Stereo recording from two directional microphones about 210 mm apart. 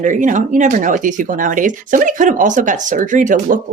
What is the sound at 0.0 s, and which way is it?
Speech, 35° right (ahead or behind).